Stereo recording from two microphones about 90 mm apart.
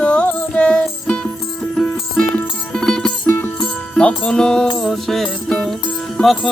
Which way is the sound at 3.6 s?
15° left (ahead or behind).